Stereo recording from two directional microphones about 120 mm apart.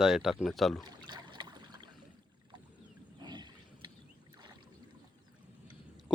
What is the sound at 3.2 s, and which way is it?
Boat, 40° right (ahead or behind).